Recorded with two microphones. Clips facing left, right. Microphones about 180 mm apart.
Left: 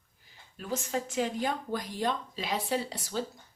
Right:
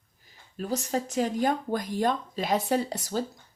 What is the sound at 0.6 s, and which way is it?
Speech, 40° right (ahead or behind).